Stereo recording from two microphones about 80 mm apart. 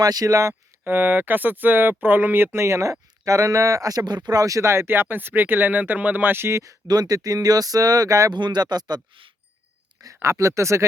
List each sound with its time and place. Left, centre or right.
0.0 s speech: right
0.9 s speech: right
6.8 s speech: right
8.3 s speech: right
10.2 s speech: right